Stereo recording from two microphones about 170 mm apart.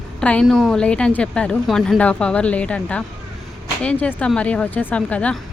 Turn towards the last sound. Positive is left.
turn(degrees=5)  # may be behind; listen again after turning